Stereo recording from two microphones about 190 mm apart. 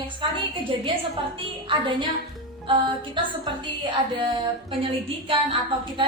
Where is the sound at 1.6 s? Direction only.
25° right (ahead or behind).